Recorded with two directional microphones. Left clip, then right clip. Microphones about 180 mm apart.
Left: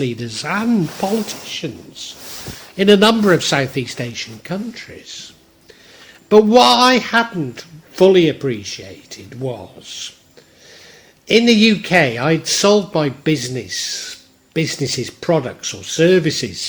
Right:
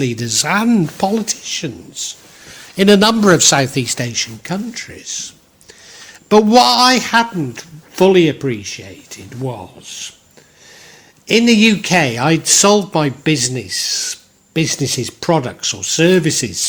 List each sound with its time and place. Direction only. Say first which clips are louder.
0.0 s speech: right 5 dB; 40° right (ahead or behind)
11.3 s speech: right 1 dB; 35° right (ahead or behind)